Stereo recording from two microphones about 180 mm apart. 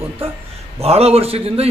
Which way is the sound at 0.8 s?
35° right (ahead or behind).